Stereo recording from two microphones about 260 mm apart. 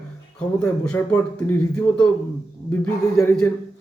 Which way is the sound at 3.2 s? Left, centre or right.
Centre.